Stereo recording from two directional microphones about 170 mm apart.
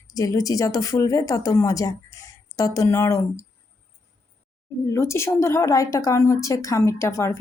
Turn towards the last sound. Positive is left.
turn(degrees=15)  # may be behind; listen again after turning